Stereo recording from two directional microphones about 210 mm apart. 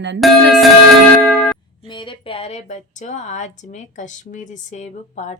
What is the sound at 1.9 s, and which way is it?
A woman's voice, 25° left (ahead or behind).